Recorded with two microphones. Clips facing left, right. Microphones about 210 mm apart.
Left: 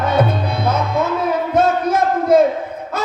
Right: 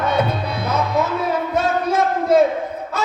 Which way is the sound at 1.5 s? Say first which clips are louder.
Left 4 dB; 50° left (ahead or behind).